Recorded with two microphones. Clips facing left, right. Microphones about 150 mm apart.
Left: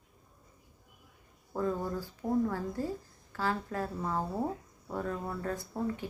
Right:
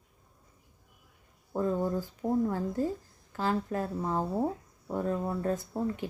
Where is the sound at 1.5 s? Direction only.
20° right (ahead or behind).